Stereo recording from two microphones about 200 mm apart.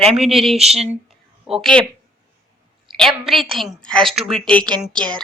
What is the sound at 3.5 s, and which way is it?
A woman's voice, centre (ahead or behind).